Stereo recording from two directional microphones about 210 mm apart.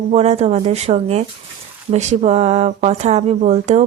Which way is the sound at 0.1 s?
30° right (ahead or behind).